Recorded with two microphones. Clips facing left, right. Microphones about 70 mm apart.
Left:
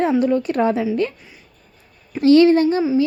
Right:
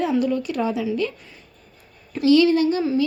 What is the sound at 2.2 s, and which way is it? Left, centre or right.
Speech, left.